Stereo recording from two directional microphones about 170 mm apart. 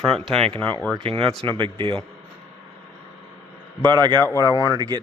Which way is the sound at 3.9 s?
25° right (ahead or behind).